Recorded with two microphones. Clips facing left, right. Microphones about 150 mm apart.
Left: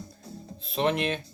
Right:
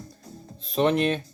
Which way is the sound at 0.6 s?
40° right (ahead or behind).